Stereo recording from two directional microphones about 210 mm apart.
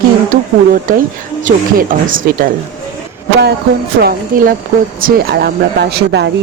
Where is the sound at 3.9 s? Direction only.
45° right (ahead or behind).